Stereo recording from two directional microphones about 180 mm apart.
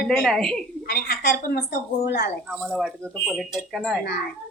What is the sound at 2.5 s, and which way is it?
A woman's voice, centre (ahead or behind).